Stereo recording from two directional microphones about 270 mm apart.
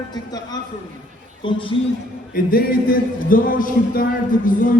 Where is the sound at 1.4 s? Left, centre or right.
Centre.